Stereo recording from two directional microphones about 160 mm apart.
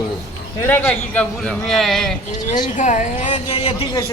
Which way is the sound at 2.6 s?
50° left (ahead or behind).